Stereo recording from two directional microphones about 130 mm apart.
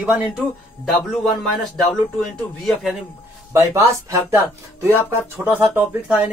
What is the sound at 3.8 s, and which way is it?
Speech, 20° right (ahead or behind).